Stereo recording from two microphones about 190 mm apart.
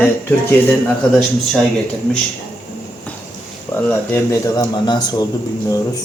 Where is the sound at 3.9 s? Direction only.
10° left (ahead or behind).